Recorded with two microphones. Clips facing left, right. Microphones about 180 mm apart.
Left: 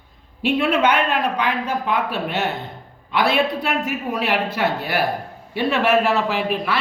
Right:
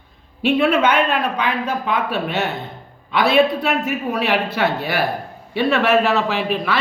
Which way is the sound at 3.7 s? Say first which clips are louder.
Right 2 dB; 60° right (ahead or behind).